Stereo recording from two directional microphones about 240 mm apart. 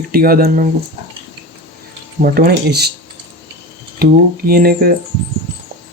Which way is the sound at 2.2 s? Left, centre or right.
Right.